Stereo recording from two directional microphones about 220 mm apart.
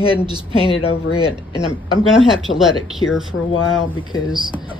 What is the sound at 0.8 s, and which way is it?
Speech, 80° left.